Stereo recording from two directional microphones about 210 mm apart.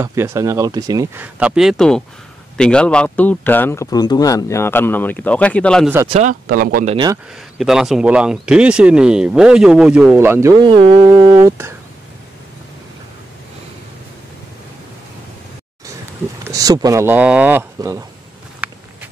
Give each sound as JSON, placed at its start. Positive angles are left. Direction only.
{"t": 0.0, "sound": "a man's voice", "side_deg": -15}
{"t": 6.0, "sound": "speech", "side_deg": -35}
{"t": 7.5, "sound": "speech", "side_deg": 0}
{"t": 11.3, "sound": "speech", "side_deg": -10}
{"t": 16.4, "sound": "speech", "side_deg": -15}
{"t": 18.6, "sound": "a sound", "side_deg": -5}